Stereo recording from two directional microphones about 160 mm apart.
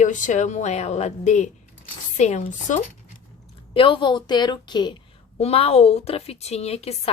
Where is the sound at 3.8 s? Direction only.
30° left (ahead or behind).